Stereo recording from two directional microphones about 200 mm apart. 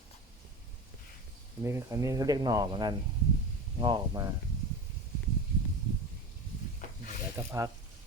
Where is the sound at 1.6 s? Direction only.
15° right (ahead or behind).